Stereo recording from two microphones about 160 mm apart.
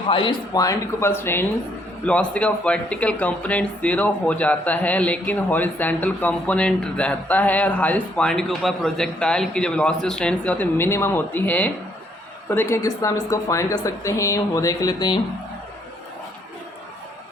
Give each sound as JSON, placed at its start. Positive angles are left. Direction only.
{"t": 0.1, "sound": "a woman's voice", "side_deg": 30}